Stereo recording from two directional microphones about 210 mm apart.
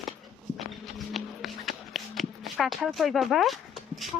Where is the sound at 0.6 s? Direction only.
Centre (ahead or behind).